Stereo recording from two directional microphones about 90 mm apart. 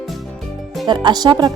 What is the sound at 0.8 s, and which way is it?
Speech, 55° right (ahead or behind).